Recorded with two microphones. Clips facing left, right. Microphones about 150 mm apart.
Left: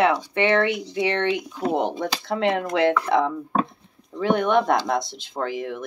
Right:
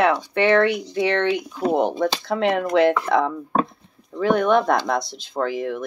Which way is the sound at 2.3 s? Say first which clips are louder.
Left 1 dB; 20° left (ahead or behind).